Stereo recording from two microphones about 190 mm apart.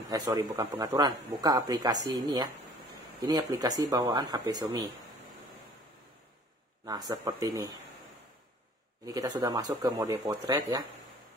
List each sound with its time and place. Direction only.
0.1 s speech: 20° right (ahead or behind)
7.1 s speech: 20° right (ahead or behind)
9.0 s speech: 20° right (ahead or behind)